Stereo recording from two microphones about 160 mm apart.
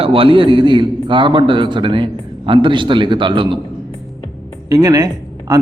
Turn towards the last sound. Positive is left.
turn(degrees=-25)  # may be behind; listen again after turning